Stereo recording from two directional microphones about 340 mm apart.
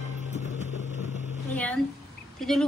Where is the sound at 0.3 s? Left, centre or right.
Centre.